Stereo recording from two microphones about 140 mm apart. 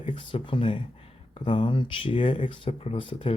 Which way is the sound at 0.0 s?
35° left (ahead or behind).